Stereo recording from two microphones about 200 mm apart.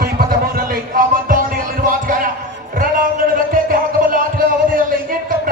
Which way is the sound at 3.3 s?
45° right (ahead or behind).